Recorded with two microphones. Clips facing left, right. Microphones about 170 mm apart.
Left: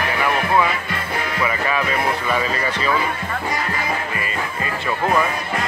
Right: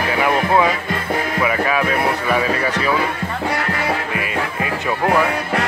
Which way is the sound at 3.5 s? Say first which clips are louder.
Right 3 dB; 70° right (ahead or behind).